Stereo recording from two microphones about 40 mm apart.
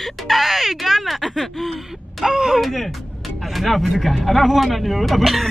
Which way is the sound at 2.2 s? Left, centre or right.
Centre.